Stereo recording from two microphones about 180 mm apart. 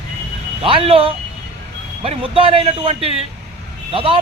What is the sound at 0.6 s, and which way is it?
Speech, 30° right (ahead or behind).